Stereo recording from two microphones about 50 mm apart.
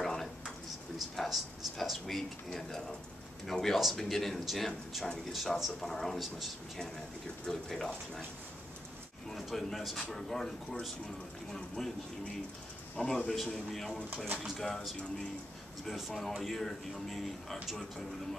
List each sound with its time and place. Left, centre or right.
0.0 s a sound: centre
1.1 s speech: centre
9.3 s speech: centre
13.0 s speech: centre
14.1 s speech: right
14.5 s speech: centre
16.0 s speech: centre